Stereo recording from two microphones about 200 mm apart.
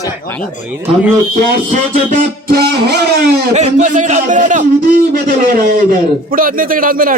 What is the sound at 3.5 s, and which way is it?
A man's voice, 35° right (ahead or behind).